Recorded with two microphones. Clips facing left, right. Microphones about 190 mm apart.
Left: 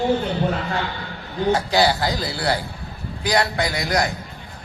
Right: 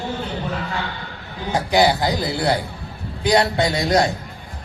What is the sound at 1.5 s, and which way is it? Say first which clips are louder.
A man's voice: right 2 dB; 15° right (ahead or behind).